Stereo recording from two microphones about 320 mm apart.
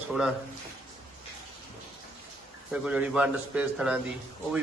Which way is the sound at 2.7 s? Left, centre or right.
Centre.